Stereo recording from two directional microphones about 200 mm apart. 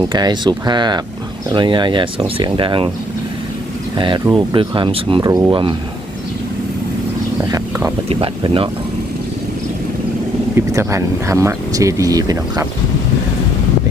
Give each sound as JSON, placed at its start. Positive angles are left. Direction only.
{"t": 0.0, "sound": "speech", "side_deg": -20}
{"t": 3.9, "sound": "speech", "side_deg": -25}
{"t": 7.4, "sound": "speech", "side_deg": -15}
{"t": 8.1, "sound": "speech", "side_deg": -25}
{"t": 10.5, "sound": "speech", "side_deg": -15}